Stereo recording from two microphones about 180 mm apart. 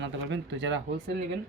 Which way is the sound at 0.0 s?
85° right.